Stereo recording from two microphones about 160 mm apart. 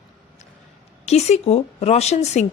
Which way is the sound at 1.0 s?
40° left (ahead or behind).